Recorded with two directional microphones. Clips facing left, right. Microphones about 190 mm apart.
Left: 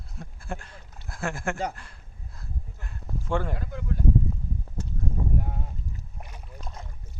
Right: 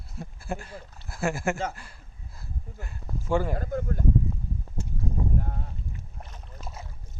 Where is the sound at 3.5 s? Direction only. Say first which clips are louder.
Right 4 dB; 45° right (ahead or behind).